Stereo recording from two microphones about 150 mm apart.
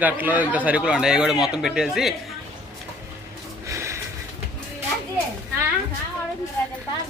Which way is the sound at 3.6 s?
20° right (ahead or behind).